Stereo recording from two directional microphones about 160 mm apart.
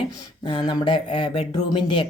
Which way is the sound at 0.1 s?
30° left (ahead or behind).